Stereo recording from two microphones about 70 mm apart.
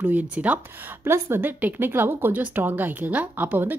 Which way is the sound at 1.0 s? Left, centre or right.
Right.